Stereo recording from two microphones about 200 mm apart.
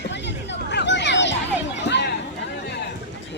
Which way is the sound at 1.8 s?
60° left (ahead or behind).